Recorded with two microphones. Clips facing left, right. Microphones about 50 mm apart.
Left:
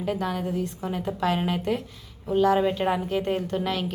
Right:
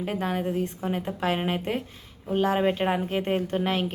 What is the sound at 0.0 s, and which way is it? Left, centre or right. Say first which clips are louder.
A woman's voice: even; right.